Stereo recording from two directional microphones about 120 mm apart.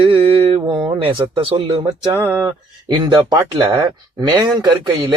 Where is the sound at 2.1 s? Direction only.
15° right (ahead or behind).